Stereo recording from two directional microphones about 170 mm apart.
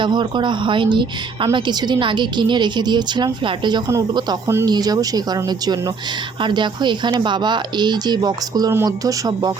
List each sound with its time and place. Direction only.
0.0 s a woman's voice: 25° right (ahead or behind)